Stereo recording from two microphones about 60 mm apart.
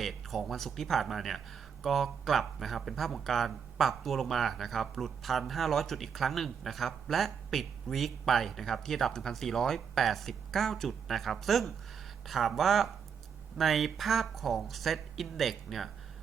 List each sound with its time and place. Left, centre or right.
0.0 s speech: centre